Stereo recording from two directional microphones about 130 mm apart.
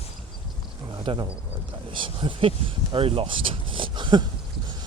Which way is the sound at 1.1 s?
40° right (ahead or behind).